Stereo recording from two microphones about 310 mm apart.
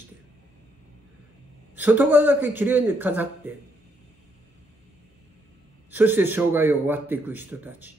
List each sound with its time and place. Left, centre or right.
1.8 s a man's voice: centre
5.9 s a man's voice: centre